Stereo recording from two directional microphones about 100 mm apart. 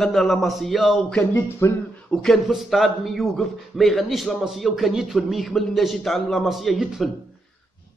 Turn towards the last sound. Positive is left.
turn(degrees=-5)  # may be behind; listen again after turning